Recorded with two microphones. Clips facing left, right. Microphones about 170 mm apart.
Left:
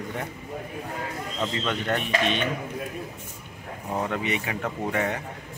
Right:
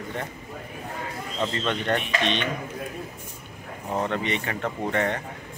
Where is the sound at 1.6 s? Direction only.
5° left (ahead or behind).